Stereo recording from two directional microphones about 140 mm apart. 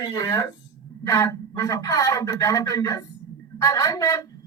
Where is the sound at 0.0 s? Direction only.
20° left (ahead or behind).